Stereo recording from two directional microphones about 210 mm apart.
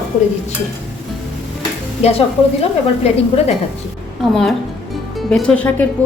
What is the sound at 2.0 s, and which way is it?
A woman's voice, 30° left (ahead or behind).